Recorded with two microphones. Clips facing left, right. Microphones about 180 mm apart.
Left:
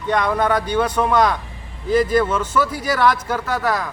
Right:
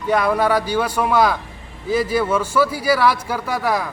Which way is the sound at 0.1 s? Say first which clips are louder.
Right 1 dB; 5° right (ahead or behind).